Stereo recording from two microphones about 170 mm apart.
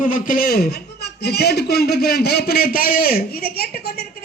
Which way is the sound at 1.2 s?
70° left (ahead or behind).